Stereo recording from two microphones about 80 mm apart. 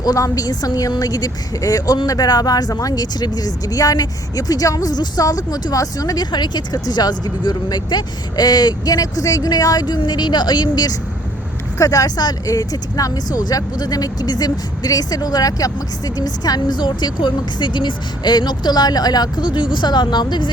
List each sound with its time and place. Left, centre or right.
0.0 s a woman's voice: left
11.8 s a woman's voice: left